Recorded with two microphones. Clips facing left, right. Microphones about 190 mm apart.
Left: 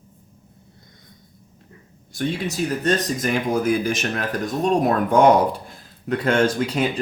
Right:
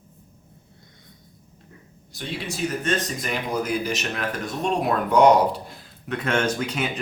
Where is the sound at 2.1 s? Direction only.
45° left (ahead or behind).